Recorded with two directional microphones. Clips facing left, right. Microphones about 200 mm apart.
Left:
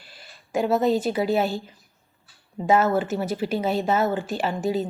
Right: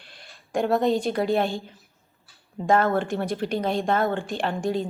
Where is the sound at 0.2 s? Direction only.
5° left (ahead or behind).